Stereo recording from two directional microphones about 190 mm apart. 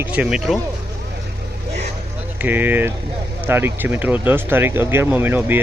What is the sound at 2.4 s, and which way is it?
Speech, 10° right (ahead or behind).